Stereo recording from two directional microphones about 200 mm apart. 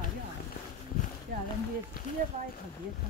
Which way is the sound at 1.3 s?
50° right (ahead or behind).